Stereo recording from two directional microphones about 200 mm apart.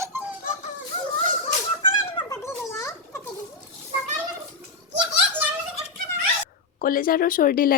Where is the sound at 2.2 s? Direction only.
15° left (ahead or behind).